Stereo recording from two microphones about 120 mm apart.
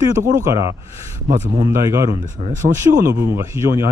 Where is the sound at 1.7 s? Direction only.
25° right (ahead or behind).